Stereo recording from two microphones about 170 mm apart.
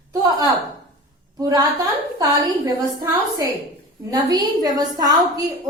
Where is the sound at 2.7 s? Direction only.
20° right (ahead or behind).